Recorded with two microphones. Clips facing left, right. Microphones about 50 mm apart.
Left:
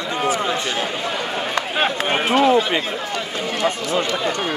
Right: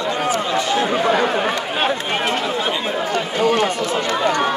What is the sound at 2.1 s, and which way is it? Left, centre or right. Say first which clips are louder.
Speech: left 1 dB; centre.